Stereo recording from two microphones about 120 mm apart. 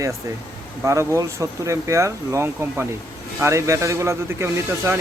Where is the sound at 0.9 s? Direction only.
25° right (ahead or behind).